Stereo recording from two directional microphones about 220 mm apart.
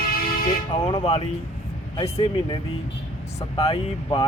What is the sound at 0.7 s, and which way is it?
Speech, 25° left (ahead or behind).